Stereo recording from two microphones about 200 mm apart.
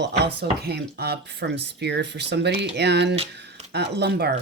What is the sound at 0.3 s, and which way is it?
Speech, 55° right (ahead or behind).